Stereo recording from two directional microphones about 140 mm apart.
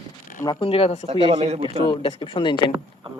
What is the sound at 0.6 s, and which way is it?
Speech, 45° left (ahead or behind).